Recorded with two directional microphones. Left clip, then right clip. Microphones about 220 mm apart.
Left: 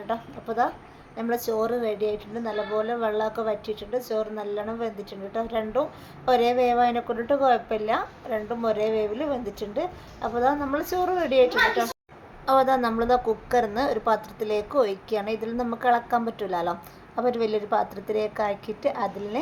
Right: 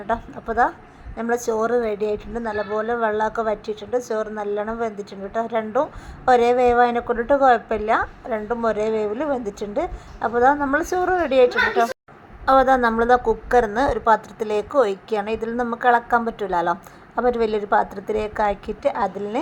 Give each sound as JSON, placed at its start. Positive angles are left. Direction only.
{"t": 0.1, "sound": "a woman's voice", "side_deg": -20}